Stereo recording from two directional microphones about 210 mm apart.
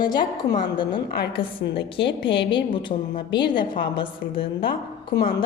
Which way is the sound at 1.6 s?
55° left (ahead or behind).